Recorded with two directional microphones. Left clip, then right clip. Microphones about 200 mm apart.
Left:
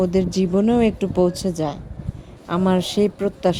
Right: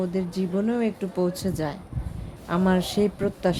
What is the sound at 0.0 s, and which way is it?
Speech, 30° left (ahead or behind).